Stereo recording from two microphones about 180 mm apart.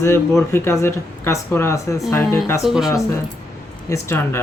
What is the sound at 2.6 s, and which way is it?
Speech, centre (ahead or behind).